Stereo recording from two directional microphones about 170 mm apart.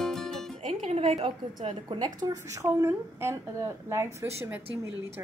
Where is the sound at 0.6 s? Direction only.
35° right (ahead or behind).